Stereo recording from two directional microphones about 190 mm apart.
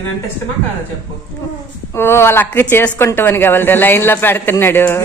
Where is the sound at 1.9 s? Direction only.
15° left (ahead or behind).